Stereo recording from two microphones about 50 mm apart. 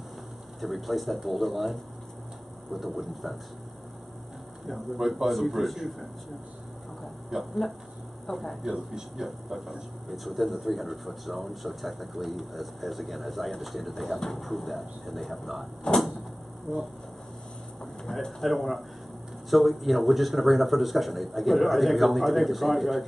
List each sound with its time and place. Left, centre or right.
0.6 s speech: centre
4.6 s speech: centre
7.2 s speech: centre
15.9 s a sound: centre
16.7 s speech: centre
18.0 s speech: centre